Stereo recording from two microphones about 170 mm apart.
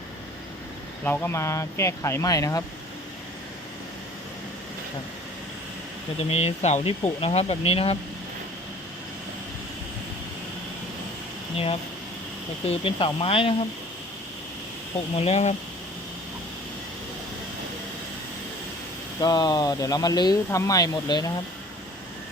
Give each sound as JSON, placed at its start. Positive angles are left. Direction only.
{"t": 1.0, "sound": "speech", "side_deg": 10}
{"t": 6.3, "sound": "speech", "side_deg": 40}
{"t": 11.5, "sound": "speech", "side_deg": 35}
{"t": 15.1, "sound": "speech", "side_deg": 35}
{"t": 19.2, "sound": "speech", "side_deg": 25}